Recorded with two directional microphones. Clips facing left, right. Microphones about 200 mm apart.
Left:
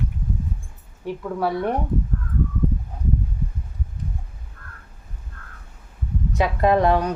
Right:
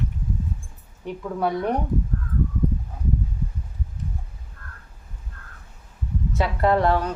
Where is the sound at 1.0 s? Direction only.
Centre (ahead or behind).